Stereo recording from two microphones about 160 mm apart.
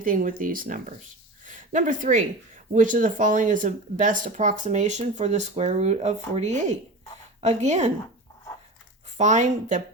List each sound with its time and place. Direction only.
0.0 s speech: 60° right (ahead or behind)
9.1 s speech: 45° right (ahead or behind)